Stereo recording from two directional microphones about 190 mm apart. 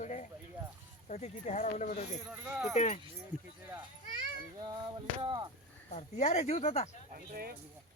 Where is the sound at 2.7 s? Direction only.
40° left (ahead or behind).